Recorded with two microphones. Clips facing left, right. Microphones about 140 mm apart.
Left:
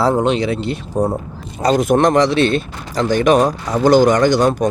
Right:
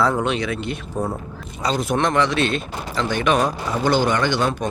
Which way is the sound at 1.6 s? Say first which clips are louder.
Left 8 dB; 50° left (ahead or behind).